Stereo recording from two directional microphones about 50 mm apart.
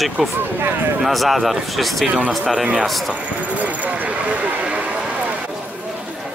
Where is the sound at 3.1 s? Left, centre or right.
Right.